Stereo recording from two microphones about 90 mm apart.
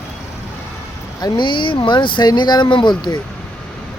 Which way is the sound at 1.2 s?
60° left (ahead or behind).